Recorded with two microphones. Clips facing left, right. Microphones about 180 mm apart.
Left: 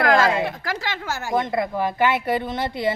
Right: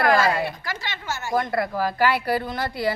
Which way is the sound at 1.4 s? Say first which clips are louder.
Left 1 dB; 20° left (ahead or behind).